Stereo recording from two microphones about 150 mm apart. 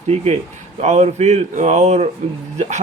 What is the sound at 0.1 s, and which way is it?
A man's voice, 45° right (ahead or behind).